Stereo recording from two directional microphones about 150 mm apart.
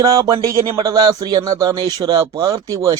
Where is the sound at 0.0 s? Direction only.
25° right (ahead or behind).